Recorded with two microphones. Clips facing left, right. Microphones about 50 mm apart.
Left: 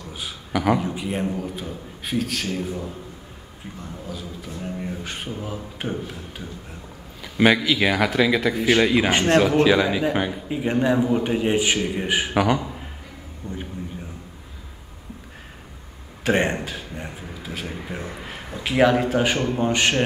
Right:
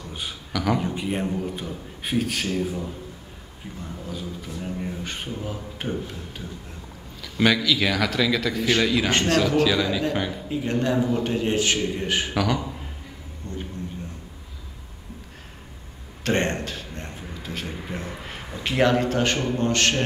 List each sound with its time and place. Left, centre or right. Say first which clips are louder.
0.5 s speech: left 4 dB; left
0.7 s speech: left 1 dB; centre
7.2 s a man's voice: left 3 dB; left
13.4 s a sound: left 2 dB; centre
16.3 s a man's voice: left 3 dB; centre